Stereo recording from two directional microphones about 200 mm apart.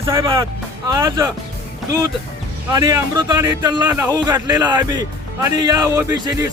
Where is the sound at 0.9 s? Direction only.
20° right (ahead or behind).